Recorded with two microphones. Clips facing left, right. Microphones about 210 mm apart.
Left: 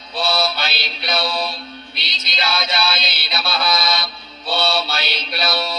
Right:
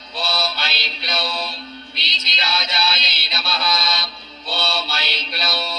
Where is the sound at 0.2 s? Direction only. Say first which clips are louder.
Left 5 dB; 55° left (ahead or behind).